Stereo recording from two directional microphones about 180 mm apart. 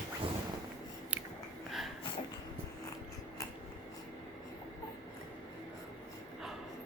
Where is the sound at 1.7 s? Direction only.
Centre (ahead or behind).